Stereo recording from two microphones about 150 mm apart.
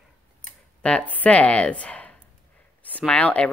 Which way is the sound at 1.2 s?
10° left (ahead or behind).